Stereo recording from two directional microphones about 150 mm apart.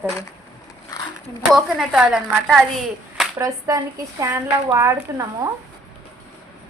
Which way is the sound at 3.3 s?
25° right (ahead or behind).